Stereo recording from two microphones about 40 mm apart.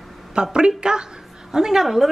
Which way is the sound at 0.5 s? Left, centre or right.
Right.